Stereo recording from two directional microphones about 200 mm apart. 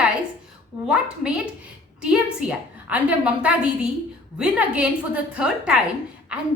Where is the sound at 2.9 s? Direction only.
5° right (ahead or behind).